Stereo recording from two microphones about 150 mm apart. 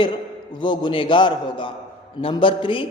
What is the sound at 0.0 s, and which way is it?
A man's voice, 30° left (ahead or behind).